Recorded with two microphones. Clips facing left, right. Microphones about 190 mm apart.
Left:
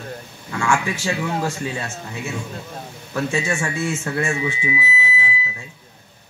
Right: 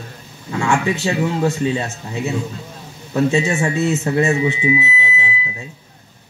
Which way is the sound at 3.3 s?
20° right (ahead or behind).